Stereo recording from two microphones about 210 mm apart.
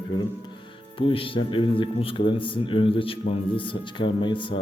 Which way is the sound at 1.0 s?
25° left (ahead or behind).